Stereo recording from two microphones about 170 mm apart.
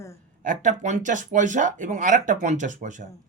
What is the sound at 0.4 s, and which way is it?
Speech, 50° right (ahead or behind).